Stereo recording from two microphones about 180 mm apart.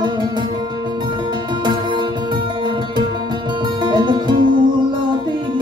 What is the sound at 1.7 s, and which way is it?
Music, 25° right (ahead or behind).